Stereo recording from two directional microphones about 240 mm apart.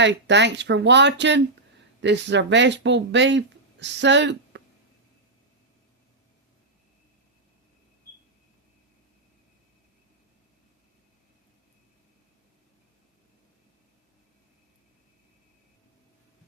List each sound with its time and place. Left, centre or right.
0.0 s speech: right